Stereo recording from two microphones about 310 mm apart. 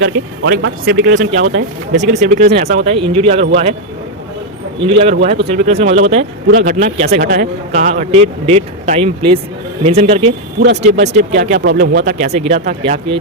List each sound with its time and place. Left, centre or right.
0.0 s speech: right
4.8 s speech: centre